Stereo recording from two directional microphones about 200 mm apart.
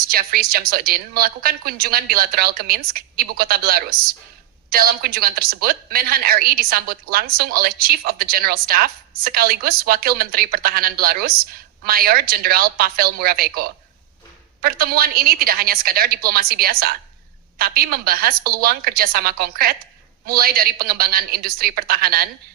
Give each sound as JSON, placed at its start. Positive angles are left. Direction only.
{"t": 0.1, "sound": "a woman's voice", "side_deg": -50}